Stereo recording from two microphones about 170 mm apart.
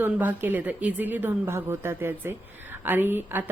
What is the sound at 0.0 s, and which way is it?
A woman's voice, 10° right (ahead or behind).